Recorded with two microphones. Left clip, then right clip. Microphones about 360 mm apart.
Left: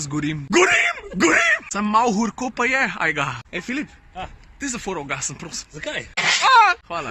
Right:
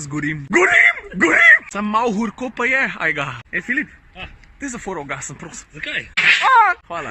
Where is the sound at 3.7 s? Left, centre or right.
Left.